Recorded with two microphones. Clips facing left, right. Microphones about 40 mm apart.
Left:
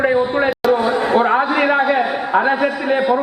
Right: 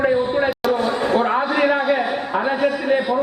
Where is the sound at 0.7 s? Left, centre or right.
Centre.